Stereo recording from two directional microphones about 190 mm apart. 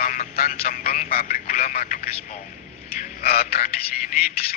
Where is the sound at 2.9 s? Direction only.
55° left (ahead or behind).